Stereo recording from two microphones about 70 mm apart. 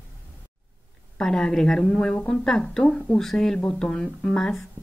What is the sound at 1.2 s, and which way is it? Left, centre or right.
A woman's voice, centre.